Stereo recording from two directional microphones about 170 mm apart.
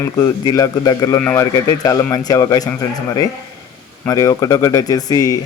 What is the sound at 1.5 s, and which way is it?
Speech, 20° left (ahead or behind).